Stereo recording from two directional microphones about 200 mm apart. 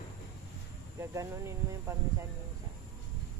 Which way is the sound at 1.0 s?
15° right (ahead or behind).